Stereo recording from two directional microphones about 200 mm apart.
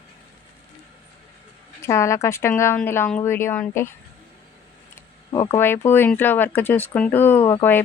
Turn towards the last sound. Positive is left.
turn(degrees=10)  # may be behind; listen again after turning